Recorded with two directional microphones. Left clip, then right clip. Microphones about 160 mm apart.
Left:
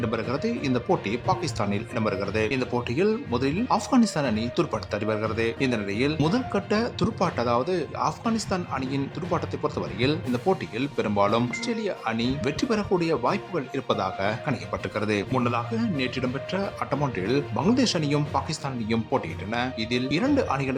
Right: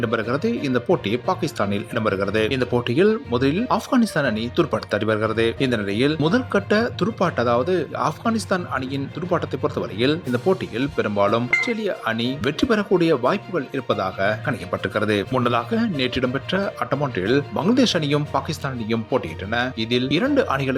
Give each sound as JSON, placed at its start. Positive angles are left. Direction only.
{"t": 0.0, "sound": "speech", "side_deg": -15}